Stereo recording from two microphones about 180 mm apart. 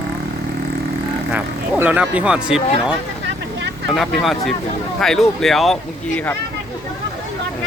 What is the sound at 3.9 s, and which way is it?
Speech, centre (ahead or behind).